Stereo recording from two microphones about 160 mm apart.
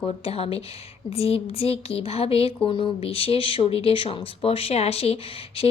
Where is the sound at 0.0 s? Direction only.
40° left (ahead or behind).